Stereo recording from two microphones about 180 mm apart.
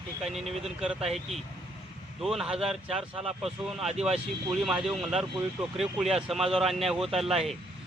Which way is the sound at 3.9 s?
35° right (ahead or behind).